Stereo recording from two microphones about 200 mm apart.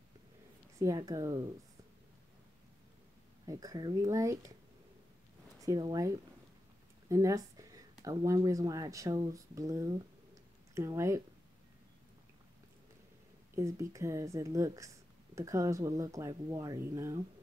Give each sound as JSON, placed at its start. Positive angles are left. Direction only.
{"t": 0.7, "sound": "speech", "side_deg": -15}
{"t": 3.4, "sound": "speech", "side_deg": -20}
{"t": 5.6, "sound": "speech", "side_deg": -20}
{"t": 13.6, "sound": "speech", "side_deg": -15}